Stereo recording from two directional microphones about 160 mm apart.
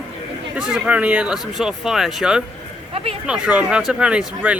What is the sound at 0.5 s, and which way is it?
Speech, 5° right (ahead or behind).